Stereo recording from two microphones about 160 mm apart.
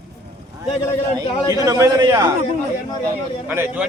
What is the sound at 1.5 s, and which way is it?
Speech, 20° right (ahead or behind).